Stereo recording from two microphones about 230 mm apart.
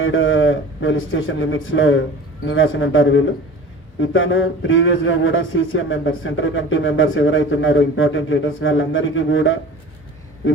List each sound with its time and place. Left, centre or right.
0.0 s a man's voice: left